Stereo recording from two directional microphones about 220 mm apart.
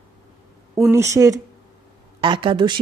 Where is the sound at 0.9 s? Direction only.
15° right (ahead or behind).